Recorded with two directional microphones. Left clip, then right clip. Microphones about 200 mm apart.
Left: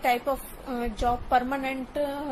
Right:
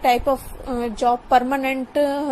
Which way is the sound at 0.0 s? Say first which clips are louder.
Right 7 dB; 20° right (ahead or behind).